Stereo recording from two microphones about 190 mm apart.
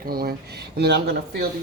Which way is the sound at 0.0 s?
50° right (ahead or behind).